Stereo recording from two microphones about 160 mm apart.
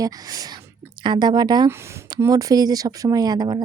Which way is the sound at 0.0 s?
25° right (ahead or behind).